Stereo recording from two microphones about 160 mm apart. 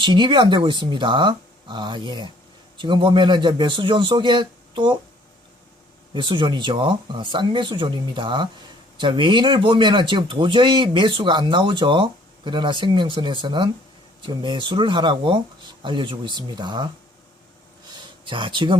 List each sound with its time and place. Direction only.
0.0 s speech: 30° right (ahead or behind)
6.1 s speech: 30° right (ahead or behind)
17.9 s a sound: 30° right (ahead or behind)